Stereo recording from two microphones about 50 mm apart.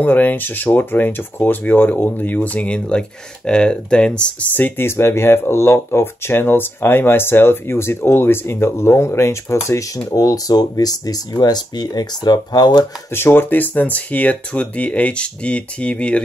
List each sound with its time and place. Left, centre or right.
0.0 s speech: left
4.6 s speech: left
4.8 s speech: left
13.1 s speech: left